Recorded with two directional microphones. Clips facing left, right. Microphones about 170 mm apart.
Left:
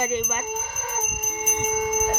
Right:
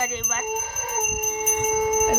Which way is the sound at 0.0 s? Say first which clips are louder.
Left 4 dB; 15° left (ahead or behind).